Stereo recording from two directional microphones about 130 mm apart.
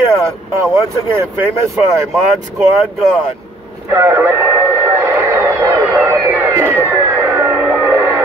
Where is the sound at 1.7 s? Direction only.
Centre (ahead or behind).